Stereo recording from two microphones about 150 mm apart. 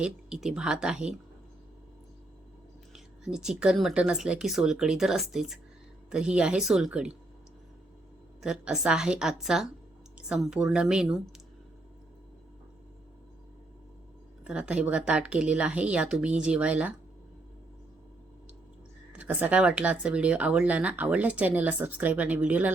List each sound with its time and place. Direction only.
0.0 s speech: 5° right (ahead or behind)
2.9 s speech: 5° right (ahead or behind)
8.4 s speech: 5° right (ahead or behind)
14.4 s speech: 10° right (ahead or behind)
19.1 s speech: 10° right (ahead or behind)